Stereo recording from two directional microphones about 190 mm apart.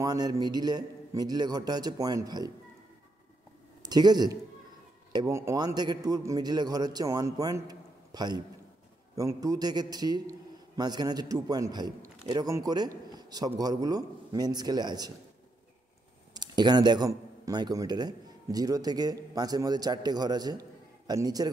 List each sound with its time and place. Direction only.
0.0 s a man's voice: 20° right (ahead or behind)
3.8 s a man's voice: 20° right (ahead or behind)
16.3 s a man's voice: 20° right (ahead or behind)